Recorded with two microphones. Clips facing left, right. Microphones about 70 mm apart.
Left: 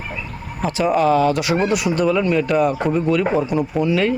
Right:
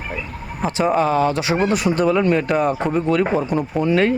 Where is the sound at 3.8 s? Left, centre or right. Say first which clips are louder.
Right 3 dB; right.